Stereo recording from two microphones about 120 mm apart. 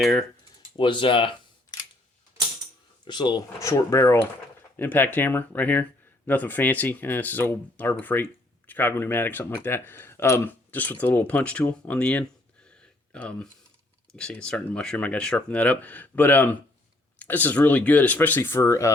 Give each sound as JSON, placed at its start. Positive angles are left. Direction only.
{"t": 0.0, "sound": "speech", "side_deg": 0}
{"t": 0.8, "sound": "speech", "side_deg": 45}
{"t": 3.0, "sound": "speech", "side_deg": 40}
{"t": 3.6, "sound": "speech", "side_deg": 25}